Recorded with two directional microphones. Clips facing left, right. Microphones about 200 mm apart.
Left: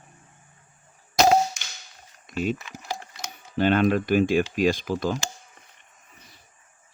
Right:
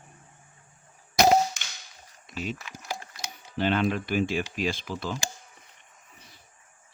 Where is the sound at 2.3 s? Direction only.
50° left (ahead or behind).